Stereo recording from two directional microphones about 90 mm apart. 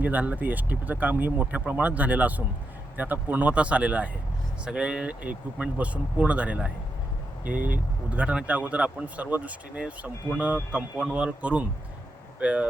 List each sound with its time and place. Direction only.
0.0 s speech: 20° right (ahead or behind)